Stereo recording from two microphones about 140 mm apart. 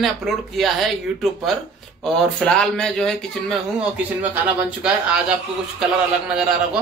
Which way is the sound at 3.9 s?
10° right (ahead or behind).